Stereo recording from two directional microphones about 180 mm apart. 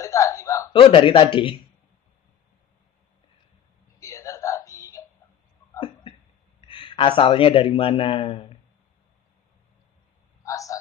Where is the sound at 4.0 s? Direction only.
20° left (ahead or behind).